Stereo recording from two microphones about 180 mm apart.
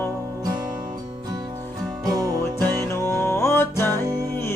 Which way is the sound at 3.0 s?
15° left (ahead or behind).